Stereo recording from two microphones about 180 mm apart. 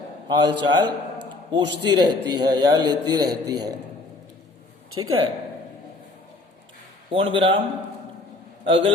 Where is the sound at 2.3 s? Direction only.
25° right (ahead or behind).